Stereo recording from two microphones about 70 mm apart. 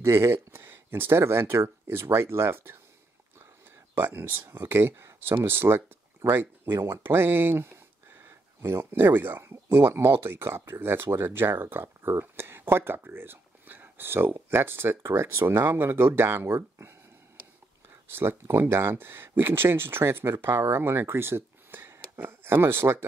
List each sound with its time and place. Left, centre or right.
0.0 s speech: right
3.9 s speech: right
18.0 s speech: right